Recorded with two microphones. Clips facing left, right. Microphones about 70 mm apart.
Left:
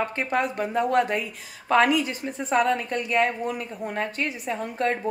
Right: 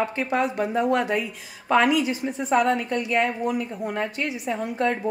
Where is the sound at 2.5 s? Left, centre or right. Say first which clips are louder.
Right 1 dB; right.